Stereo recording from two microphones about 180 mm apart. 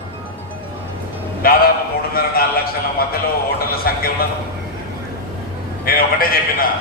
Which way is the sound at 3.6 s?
55° left (ahead or behind).